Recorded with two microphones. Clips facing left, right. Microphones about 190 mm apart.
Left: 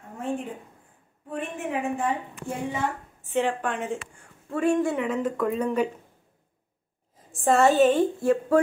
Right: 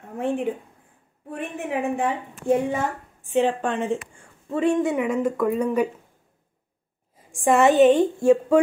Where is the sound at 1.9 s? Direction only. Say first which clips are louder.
Right 2 dB; 65° right (ahead or behind).